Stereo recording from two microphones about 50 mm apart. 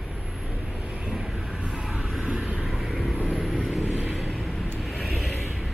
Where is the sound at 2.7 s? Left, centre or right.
Centre.